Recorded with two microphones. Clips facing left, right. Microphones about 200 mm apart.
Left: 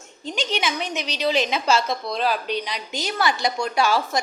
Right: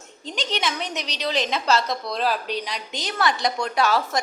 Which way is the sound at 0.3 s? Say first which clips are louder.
Left 2 dB; centre (ahead or behind).